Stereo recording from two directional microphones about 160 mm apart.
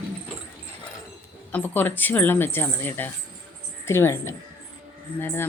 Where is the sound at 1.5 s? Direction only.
10° left (ahead or behind).